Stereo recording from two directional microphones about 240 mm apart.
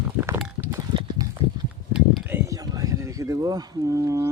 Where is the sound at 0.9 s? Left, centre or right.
Centre.